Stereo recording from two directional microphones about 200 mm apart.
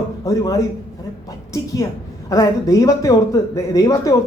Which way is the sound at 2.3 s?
15° left (ahead or behind).